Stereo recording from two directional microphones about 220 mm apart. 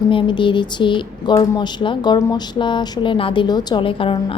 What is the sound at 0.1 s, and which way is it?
Speech, 20° left (ahead or behind).